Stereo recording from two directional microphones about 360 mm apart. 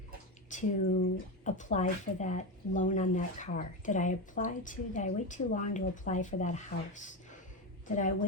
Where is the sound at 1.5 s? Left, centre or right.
Centre.